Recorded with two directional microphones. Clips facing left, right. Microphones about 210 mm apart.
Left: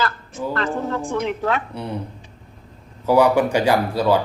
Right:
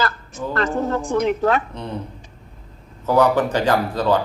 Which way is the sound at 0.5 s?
40° right (ahead or behind).